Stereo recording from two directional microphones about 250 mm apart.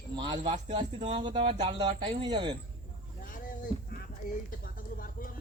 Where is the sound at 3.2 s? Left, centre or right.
Left.